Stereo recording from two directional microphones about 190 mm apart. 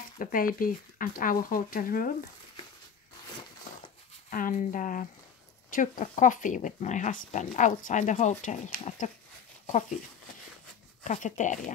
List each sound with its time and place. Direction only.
0.2 s speech: 45° left (ahead or behind)
4.3 s speech: 45° left (ahead or behind)
11.1 s speech: 40° left (ahead or behind)